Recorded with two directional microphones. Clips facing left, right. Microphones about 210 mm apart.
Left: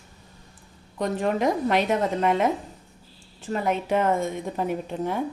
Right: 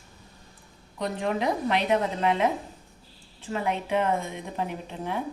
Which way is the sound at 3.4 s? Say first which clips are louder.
Left 3 dB; 40° left (ahead or behind).